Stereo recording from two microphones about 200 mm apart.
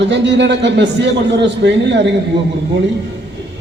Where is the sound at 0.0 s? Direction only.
60° right (ahead or behind).